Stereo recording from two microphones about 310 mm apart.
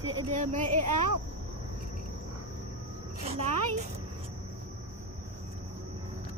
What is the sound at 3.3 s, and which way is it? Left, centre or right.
Speech, right.